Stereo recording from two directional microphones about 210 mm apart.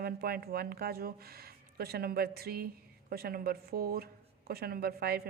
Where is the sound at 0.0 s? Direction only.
45° right (ahead or behind).